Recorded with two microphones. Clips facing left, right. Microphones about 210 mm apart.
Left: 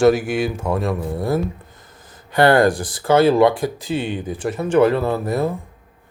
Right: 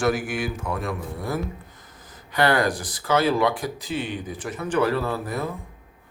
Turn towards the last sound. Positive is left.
turn(degrees=25)  # may be behind; listen again after turning